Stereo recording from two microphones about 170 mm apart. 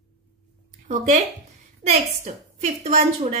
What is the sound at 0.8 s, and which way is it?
A woman's voice, 45° right (ahead or behind).